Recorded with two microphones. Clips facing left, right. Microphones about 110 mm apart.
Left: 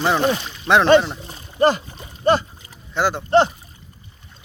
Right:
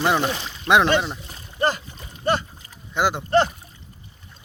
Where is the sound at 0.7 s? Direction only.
15° left (ahead or behind).